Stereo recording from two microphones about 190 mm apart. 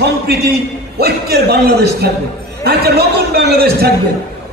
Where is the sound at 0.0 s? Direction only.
55° right (ahead or behind).